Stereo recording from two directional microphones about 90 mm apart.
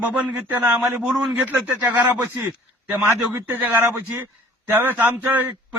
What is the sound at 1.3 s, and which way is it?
Speech, 20° right (ahead or behind).